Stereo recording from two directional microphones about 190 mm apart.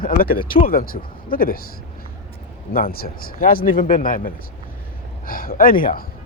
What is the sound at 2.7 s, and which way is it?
Speech, 50° left (ahead or behind).